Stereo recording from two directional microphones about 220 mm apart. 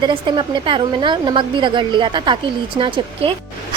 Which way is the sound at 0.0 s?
20° right (ahead or behind).